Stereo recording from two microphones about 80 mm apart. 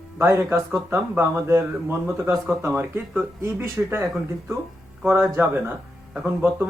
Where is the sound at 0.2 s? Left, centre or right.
Right.